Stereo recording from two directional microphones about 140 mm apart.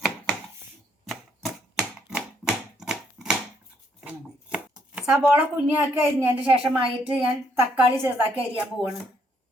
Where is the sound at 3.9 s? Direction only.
10° right (ahead or behind).